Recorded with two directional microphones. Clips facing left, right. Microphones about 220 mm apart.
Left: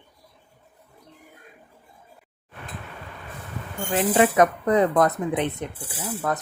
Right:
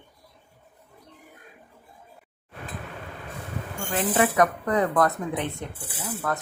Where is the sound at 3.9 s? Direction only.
20° left (ahead or behind).